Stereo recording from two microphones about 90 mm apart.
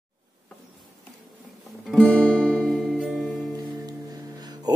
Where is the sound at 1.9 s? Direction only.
10° left (ahead or behind).